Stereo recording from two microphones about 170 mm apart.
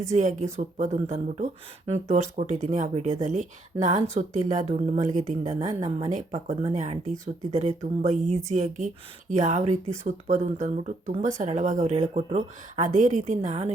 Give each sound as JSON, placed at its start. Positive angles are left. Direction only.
{"t": 0.2, "sound": "speech", "side_deg": -45}